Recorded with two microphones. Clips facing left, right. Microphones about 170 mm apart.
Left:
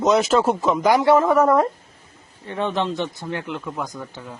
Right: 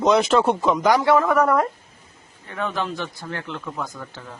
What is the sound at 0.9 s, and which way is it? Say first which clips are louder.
Speech: left 2 dB; 15° left (ahead or behind).